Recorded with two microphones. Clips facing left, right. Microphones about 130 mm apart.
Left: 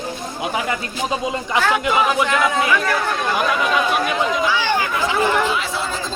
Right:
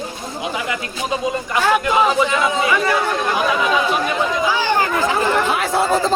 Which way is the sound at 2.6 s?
Centre (ahead or behind).